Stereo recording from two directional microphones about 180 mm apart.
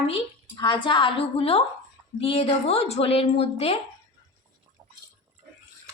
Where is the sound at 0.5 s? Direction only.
25° left (ahead or behind).